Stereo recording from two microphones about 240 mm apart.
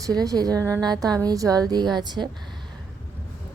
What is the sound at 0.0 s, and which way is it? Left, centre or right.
A woman's voice, centre.